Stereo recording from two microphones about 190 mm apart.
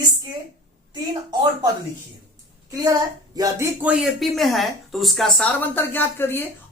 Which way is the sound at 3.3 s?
10° right (ahead or behind).